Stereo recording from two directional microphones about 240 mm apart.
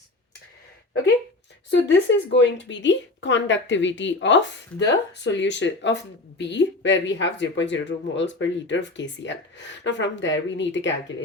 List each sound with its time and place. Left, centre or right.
1.7 s speech: left